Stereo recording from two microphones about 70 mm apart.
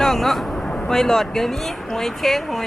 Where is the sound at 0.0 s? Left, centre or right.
Centre.